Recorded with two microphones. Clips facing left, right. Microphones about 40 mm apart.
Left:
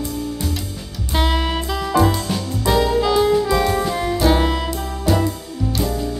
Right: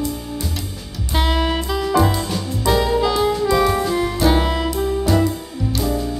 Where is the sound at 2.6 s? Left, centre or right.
Centre.